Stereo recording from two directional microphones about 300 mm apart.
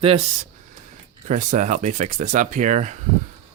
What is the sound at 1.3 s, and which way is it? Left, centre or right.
Speech, right.